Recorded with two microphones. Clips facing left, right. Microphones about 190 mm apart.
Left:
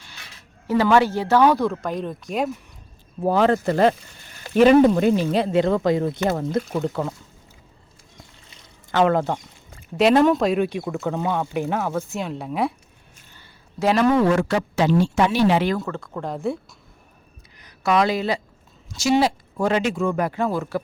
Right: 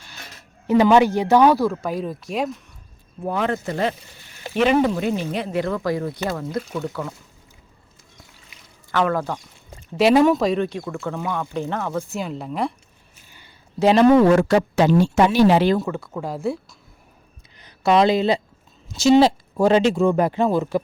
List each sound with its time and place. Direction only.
0.7 s speech: 20° right (ahead or behind); by 2.5 s centre (ahead or behind)
3.2 s speech: 35° left (ahead or behind)
4.9 s speech: 45° left (ahead or behind)
5.3 s speech: 30° left (ahead or behind)
8.4 s pour: 25° left (ahead or behind)
10.0 s speech: centre (ahead or behind)
10.7 s speech: 20° left (ahead or behind)
13.3 s a sound: 20° right (ahead or behind)
14.2 s speech: 45° right (ahead or behind)
15.8 s speech: 5° right (ahead or behind)
17.6 s speech: 25° right (ahead or behind)